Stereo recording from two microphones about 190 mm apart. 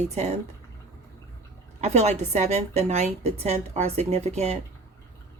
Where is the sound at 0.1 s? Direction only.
35° right (ahead or behind).